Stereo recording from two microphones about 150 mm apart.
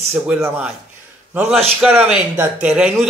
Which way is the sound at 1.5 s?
Centre (ahead or behind).